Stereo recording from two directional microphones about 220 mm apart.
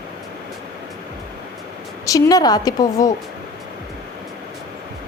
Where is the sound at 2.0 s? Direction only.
15° left (ahead or behind).